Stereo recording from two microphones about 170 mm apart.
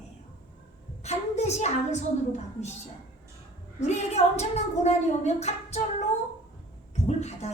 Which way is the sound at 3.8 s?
40° left (ahead or behind).